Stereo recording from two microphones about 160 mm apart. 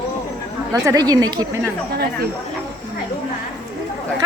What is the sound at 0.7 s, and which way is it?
Speech, 20° right (ahead or behind).